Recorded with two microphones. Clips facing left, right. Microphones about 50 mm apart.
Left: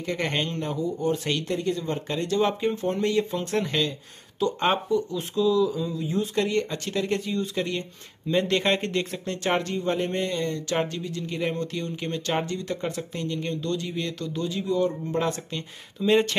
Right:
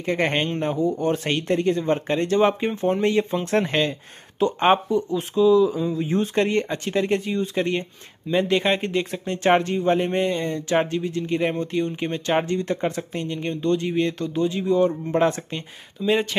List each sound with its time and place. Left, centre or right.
0.0 s speech: right
0.8 s speech: right
4.4 s speech: right
8.3 s speech: centre
9.4 s speech: right
16.0 s speech: centre